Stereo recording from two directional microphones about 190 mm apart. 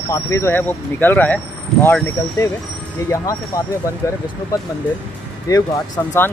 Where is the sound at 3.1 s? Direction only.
20° left (ahead or behind).